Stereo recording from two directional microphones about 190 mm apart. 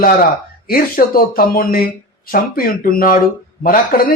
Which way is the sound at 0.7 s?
50° left (ahead or behind).